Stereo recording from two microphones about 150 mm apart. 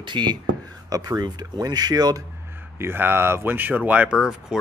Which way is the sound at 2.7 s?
15° right (ahead or behind).